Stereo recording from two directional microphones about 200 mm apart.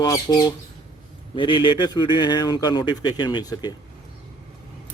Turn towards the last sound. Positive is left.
turn(degrees=20)  # may be behind; listen again after turning